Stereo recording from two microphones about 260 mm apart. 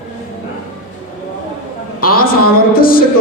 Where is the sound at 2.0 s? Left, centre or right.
Left.